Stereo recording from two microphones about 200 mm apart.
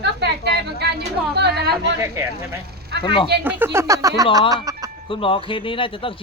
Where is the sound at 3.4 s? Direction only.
10° right (ahead or behind).